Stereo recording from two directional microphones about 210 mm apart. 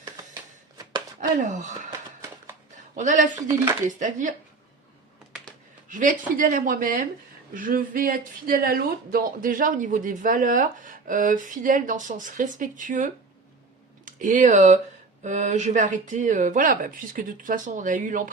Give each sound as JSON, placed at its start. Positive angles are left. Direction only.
{"t": 1.4, "sound": "speech", "side_deg": -35}
{"t": 5.9, "sound": "speech", "side_deg": -40}